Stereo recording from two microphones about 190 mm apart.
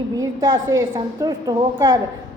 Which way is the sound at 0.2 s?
20° right (ahead or behind).